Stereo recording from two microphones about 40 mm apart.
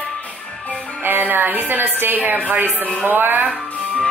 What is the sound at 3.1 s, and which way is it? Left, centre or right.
Music, right.